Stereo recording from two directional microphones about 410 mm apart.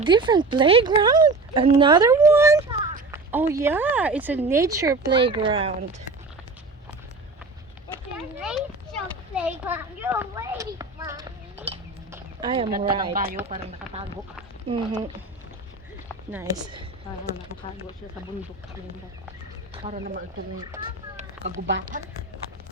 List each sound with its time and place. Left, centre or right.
0.0 s speech: centre
8.4 s a sound: centre
12.7 s speech: centre
16.3 s speech: centre
19.7 s speech: centre
20.7 s a sound: centre